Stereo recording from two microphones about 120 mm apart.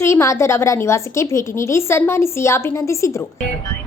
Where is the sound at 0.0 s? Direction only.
25° left (ahead or behind).